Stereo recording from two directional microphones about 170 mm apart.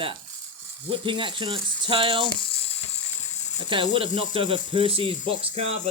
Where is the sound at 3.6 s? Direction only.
30° right (ahead or behind).